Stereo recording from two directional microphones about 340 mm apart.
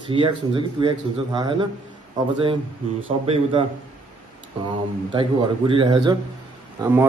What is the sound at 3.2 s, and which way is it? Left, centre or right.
Speech, centre.